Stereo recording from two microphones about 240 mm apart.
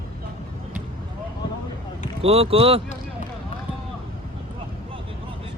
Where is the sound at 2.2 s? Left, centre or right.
Right.